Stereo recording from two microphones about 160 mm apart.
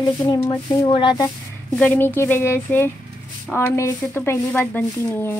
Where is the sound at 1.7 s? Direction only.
10° left (ahead or behind).